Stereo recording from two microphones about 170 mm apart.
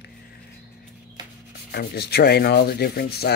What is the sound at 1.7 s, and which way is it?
Rub, 70° left (ahead or behind).